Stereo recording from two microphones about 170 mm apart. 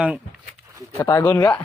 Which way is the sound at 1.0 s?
25° left (ahead or behind).